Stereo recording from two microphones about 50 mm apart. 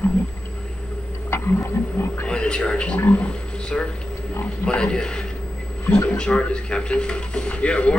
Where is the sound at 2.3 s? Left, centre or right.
Centre.